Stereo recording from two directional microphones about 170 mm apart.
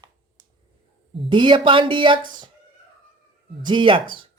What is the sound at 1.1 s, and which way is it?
Speech, 30° right (ahead or behind).